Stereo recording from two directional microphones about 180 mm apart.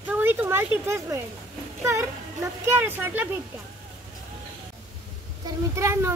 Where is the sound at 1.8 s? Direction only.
15° right (ahead or behind).